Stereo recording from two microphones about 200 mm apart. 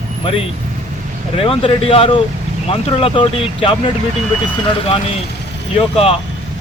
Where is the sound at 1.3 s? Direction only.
30° left (ahead or behind).